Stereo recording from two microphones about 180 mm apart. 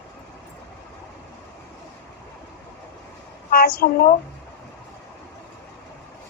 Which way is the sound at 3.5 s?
55° left (ahead or behind).